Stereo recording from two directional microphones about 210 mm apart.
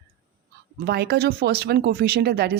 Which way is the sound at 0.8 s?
50° right (ahead or behind).